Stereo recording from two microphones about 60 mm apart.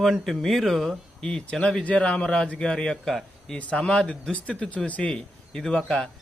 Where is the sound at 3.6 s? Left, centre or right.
Centre.